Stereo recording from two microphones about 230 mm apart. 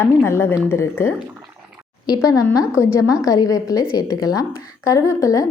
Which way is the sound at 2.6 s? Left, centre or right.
Centre.